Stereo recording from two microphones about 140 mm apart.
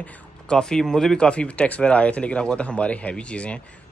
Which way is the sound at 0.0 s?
5° left (ahead or behind).